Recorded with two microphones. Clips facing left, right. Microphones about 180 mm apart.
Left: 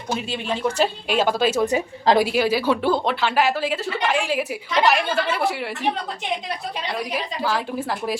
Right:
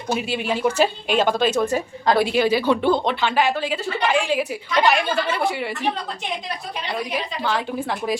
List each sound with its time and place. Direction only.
0.1 s speech: 10° right (ahead or behind)
1.0 s speech: 5° left (ahead or behind)
1.6 s a woman's voice: 15° left (ahead or behind)
2.2 s speech: 5° left (ahead or behind)
6.9 s speech: centre (ahead or behind)